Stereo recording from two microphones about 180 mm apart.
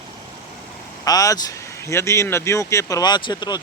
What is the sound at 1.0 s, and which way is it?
Speech, 20° left (ahead or behind).